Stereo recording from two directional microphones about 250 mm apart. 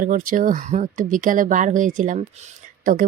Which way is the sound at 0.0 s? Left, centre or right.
Right.